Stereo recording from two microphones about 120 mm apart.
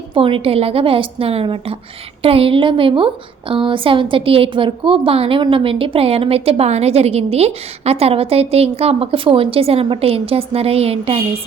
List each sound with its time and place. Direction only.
0.1 s a woman's voice: 50° right (ahead or behind)